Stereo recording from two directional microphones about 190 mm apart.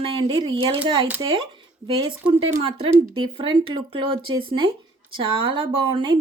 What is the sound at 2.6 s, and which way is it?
Speech, 30° right (ahead or behind).